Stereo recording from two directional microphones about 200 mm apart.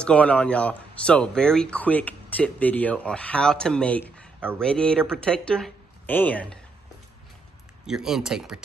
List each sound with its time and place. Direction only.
0.0 s speech: 5° left (ahead or behind)
7.8 s speech: 5° right (ahead or behind)